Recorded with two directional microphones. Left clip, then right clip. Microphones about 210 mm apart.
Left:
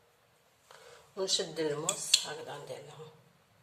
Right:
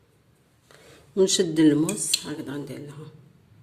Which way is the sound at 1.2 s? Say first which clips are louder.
Right 12 dB; 50° right (ahead or behind).